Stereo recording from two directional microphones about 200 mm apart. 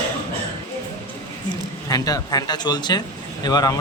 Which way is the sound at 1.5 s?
20° left (ahead or behind).